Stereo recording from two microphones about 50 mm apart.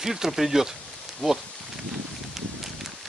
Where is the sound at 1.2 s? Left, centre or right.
Centre.